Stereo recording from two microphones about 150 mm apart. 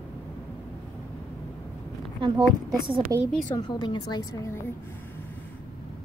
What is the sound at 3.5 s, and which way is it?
A woman's voice, 30° left (ahead or behind).